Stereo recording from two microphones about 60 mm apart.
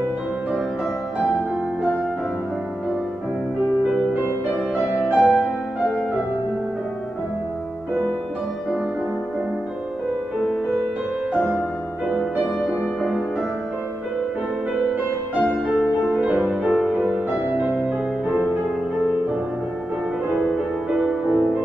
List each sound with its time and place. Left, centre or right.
5.1 s music: centre
16.2 s music: centre
16.4 s music: centre
20.9 s music: centre